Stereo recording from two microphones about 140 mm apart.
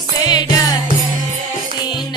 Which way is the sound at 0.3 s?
30° left (ahead or behind).